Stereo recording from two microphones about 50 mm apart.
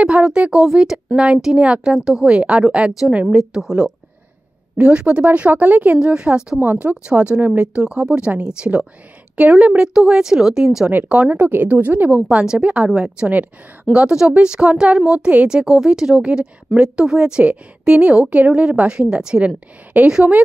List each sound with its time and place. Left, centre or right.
0.0 s a woman's voice: centre
3.3 s speech: centre
4.7 s a woman's voice: right
6.0 s a woman's voice: right
6.6 s a woman's voice: right; by 10.9 s centre
11.2 s speech: right
12.1 s a woman's voice: right